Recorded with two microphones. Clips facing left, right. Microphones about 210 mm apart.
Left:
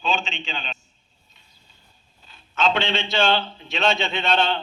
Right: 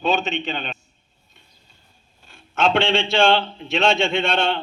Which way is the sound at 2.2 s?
50° right (ahead or behind).